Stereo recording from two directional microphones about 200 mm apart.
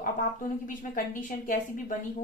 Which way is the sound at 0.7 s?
40° left (ahead or behind).